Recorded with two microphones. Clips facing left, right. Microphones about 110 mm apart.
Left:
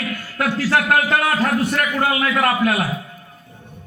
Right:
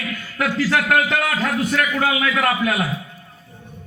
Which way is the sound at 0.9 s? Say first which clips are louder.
Left 1 dB; 45° left (ahead or behind).